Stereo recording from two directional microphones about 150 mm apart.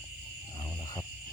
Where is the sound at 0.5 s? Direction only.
25° left (ahead or behind).